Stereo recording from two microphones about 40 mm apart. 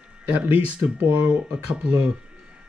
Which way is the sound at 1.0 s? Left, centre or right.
Right.